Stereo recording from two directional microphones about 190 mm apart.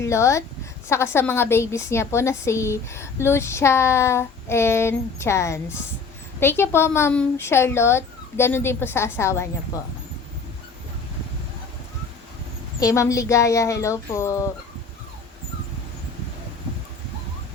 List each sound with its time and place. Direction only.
0.0 s a woman's voice: 15° left (ahead or behind)
12.8 s a woman's voice: 15° left (ahead or behind)